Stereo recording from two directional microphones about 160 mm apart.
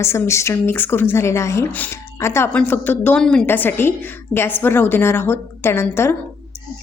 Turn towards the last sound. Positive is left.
turn(degrees=15)  # may be behind; listen again after turning